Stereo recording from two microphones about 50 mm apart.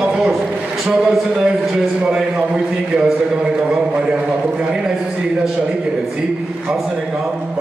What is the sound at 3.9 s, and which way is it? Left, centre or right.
Speech, right.